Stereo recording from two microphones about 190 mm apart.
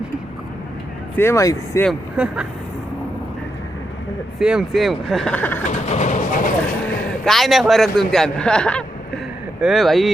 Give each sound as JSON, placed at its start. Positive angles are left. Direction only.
{"t": 1.1, "sound": "speech", "side_deg": 15}
{"t": 1.9, "sound": "speech", "side_deg": -5}
{"t": 4.4, "sound": "speech", "side_deg": -5}
{"t": 5.6, "sound": "vehicle", "side_deg": 40}
{"t": 7.3, "sound": "speech", "side_deg": 0}